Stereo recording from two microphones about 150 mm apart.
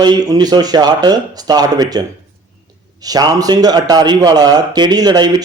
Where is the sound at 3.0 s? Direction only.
25° right (ahead or behind).